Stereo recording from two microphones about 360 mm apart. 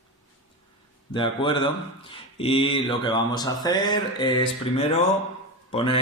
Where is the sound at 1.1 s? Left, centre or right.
Centre.